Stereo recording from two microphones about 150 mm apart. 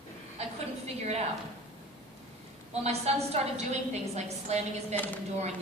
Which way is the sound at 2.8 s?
45° right (ahead or behind).